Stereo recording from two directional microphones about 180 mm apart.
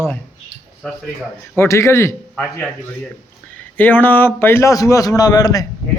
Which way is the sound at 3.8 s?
10° left (ahead or behind).